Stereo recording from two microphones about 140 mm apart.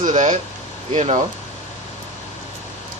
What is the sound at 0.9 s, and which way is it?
Speech, 50° right (ahead or behind).